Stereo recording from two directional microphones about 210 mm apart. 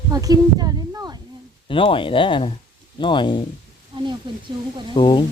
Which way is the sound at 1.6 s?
25° left (ahead or behind).